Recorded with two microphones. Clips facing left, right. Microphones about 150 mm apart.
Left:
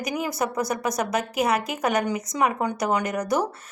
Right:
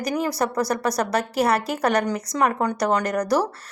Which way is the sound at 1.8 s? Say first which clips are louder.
Right 2 dB; 5° left (ahead or behind).